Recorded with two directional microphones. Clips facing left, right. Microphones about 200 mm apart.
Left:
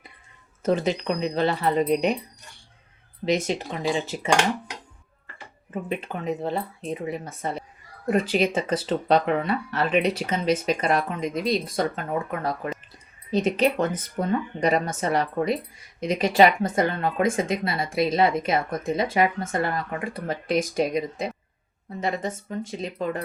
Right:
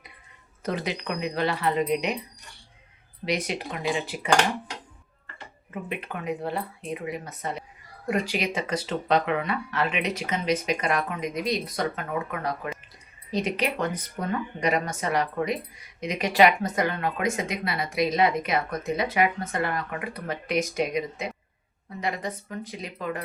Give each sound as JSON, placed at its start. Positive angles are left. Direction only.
{"t": 0.6, "sound": "speech", "side_deg": 25}
{"t": 1.6, "sound": "speech", "side_deg": 35}
{"t": 3.2, "sound": "speech", "side_deg": 25}
{"t": 5.9, "sound": "speech", "side_deg": 30}
{"t": 22.4, "sound": "speech", "side_deg": 25}